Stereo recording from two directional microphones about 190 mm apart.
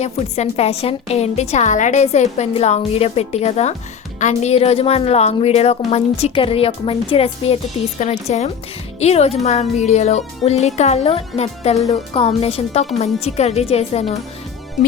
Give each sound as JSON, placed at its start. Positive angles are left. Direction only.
{"t": 0.0, "sound": "a woman's voice", "side_deg": 35}